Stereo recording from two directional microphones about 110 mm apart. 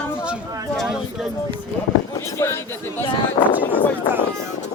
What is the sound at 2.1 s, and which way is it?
Speech, 25° left (ahead or behind).